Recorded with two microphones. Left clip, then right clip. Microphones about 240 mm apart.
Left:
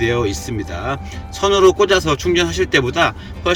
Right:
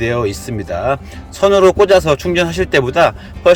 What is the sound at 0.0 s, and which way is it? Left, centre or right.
Speech, centre.